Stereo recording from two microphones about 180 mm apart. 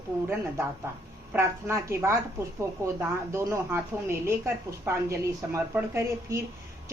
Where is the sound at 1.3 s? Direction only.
15° right (ahead or behind).